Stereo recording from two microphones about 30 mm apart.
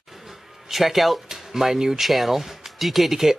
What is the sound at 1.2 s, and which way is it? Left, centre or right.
Speech, centre.